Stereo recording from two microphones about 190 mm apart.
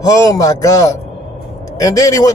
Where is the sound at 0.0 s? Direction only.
15° left (ahead or behind).